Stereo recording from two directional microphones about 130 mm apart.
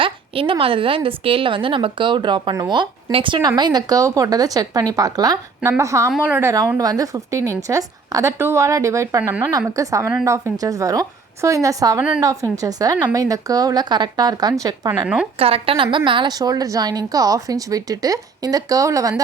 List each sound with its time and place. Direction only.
0.0 s a woman's voice: 45° right (ahead or behind); by 6.1 s 25° right (ahead or behind)
6.2 s a woman's voice: 15° right (ahead or behind)
6.7 s a woman's voice: 25° right (ahead or behind)
15.0 s a woman's voice: 5° right (ahead or behind)
15.4 s a woman's voice: 45° right (ahead or behind); by 19.2 s 25° right (ahead or behind)